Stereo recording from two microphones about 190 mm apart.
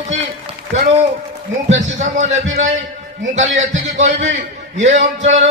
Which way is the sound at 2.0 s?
35° right (ahead or behind).